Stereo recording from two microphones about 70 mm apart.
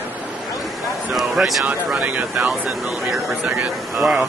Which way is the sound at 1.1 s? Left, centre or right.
Centre.